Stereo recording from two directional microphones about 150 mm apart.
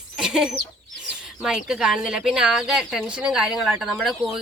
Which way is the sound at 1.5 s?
5° right (ahead or behind).